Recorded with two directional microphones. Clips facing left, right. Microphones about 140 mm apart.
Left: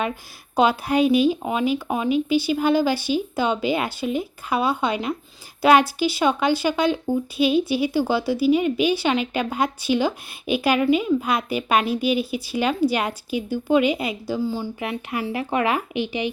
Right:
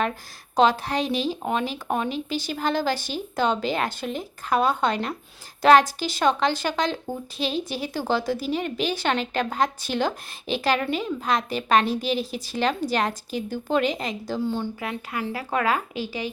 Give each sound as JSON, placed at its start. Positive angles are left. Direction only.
{"t": 0.5, "sound": "speech", "side_deg": 10}
{"t": 14.8, "sound": "speech", "side_deg": 15}